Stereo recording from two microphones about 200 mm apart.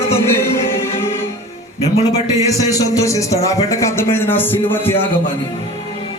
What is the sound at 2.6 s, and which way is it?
Speech, 15° left (ahead or behind).